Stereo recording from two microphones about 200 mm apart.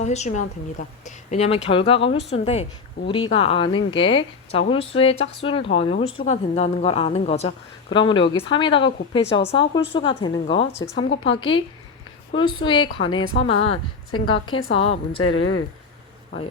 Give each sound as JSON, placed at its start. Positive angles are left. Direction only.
{"t": 0.0, "sound": "a woman's voice", "side_deg": 35}
{"t": 15.2, "sound": "speech", "side_deg": 90}